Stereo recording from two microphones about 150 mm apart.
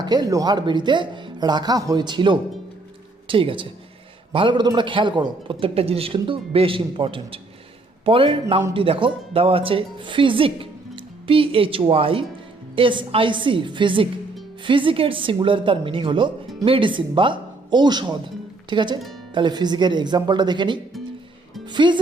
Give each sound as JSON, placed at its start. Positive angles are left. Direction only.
{"t": 0.0, "sound": "a man's voice", "side_deg": -25}